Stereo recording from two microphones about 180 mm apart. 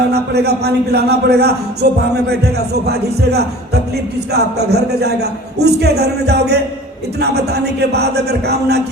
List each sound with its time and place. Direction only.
0.0 s a man's voice: 65° right (ahead or behind)